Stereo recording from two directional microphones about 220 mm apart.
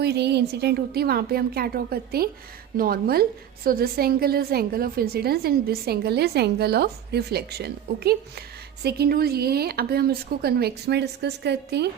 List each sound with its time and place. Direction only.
0.0 s a woman's voice: 50° right (ahead or behind)